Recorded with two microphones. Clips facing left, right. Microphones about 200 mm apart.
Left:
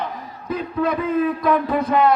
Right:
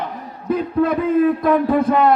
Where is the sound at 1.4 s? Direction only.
50° right (ahead or behind).